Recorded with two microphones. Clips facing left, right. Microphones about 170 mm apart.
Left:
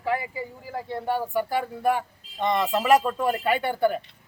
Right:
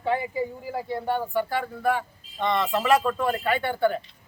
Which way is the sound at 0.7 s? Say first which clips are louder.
Left 3 dB; 5° right (ahead or behind).